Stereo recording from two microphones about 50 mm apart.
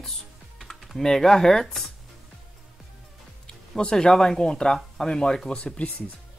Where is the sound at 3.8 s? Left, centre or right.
Centre.